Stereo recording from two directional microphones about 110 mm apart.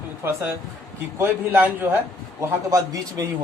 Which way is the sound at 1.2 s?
20° right (ahead or behind).